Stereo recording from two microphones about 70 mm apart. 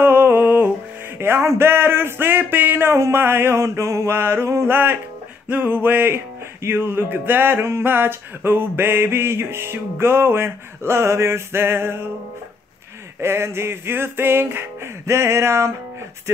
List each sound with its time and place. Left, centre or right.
0.0 s music: right
1.1 s music: right
5.5 s music: right
13.2 s music: right